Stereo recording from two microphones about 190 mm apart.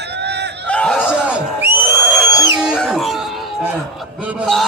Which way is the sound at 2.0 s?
5° left (ahead or behind).